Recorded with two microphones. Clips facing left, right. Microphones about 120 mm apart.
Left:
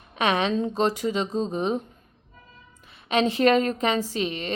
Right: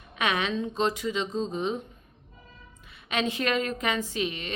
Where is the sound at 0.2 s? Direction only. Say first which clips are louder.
Left 5 dB; 35° left (ahead or behind).